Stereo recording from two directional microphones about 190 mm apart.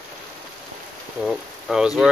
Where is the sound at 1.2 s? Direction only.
5° right (ahead or behind).